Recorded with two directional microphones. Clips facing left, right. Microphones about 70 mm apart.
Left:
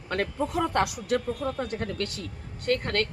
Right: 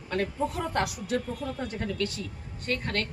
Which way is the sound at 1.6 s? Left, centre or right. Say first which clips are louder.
Even; left.